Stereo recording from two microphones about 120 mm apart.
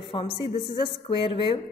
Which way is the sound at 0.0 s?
50° left (ahead or behind).